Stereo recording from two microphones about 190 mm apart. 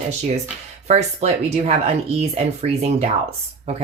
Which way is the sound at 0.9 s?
35° right (ahead or behind).